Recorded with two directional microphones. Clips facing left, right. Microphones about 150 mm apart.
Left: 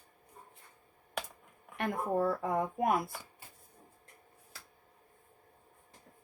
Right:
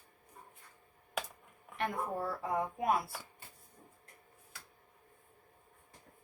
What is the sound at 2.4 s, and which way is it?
Speech, 50° left (ahead or behind).